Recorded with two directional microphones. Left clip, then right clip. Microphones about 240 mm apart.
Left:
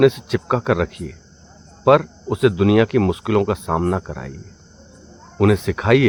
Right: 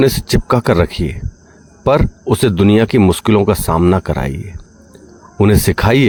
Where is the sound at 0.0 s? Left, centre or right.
Right.